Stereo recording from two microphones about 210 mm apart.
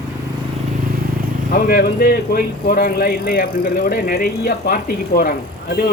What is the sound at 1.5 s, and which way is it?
Speech, 45° left (ahead or behind).